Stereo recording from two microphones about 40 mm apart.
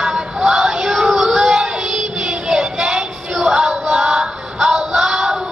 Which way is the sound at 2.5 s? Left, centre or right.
Centre.